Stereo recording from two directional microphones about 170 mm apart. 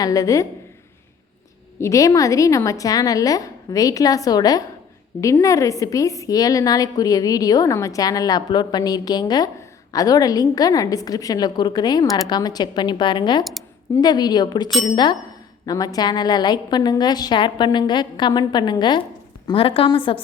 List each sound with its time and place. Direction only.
0.0 s a woman's voice: 20° left (ahead or behind)
1.8 s a woman's voice: 20° left (ahead or behind)